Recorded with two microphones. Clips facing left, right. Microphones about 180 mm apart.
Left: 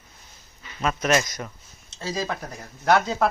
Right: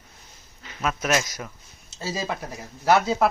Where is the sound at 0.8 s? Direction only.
5° right (ahead or behind).